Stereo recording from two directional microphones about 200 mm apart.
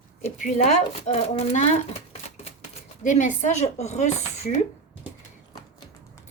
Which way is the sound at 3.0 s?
40° left (ahead or behind).